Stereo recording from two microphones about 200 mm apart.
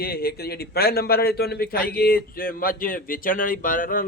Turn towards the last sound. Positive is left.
turn(degrees=45)  # may be behind; listen again after turning